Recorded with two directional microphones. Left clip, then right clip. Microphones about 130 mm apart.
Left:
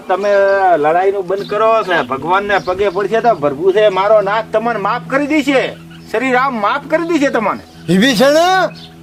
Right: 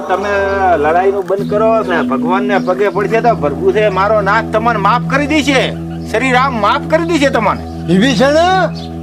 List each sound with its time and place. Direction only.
0.1 s speech: 25° right (ahead or behind)
0.7 s speech: centre (ahead or behind)
1.3 s speech: 15° left (ahead or behind)
3.2 s speech: 15° right (ahead or behind)
3.7 s a man's voice: 40° right (ahead or behind)
4.2 s a man's voice: 25° right (ahead or behind); by 7.5 s 50° right (ahead or behind)
7.9 s speech: 5° left (ahead or behind)